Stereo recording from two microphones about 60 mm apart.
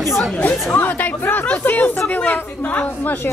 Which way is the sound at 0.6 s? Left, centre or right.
Left.